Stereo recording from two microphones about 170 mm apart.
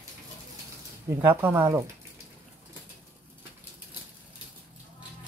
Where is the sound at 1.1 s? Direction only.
15° right (ahead or behind).